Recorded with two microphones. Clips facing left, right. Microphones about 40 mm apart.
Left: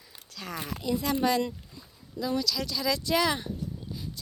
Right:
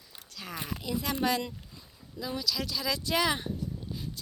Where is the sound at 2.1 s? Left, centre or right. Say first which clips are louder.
Left 4 dB; centre.